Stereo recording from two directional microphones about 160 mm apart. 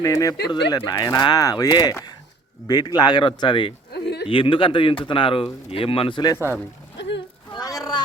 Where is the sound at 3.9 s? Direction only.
90° left.